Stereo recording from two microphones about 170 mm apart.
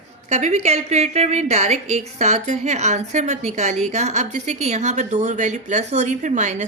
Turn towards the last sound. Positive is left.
turn(degrees=-45)  # may be behind; listen again after turning